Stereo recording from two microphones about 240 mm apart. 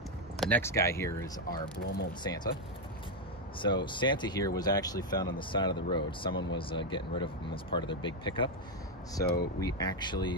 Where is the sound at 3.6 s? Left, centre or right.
Centre.